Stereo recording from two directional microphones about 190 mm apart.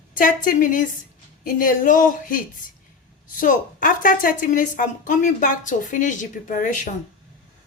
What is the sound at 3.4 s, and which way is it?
A woman's voice, 45° left (ahead or behind).